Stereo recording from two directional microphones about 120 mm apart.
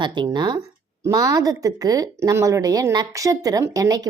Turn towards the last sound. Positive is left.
turn(degrees=-30)  # may be behind; listen again after turning